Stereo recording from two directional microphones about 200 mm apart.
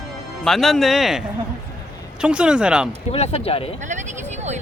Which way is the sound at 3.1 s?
30° left (ahead or behind).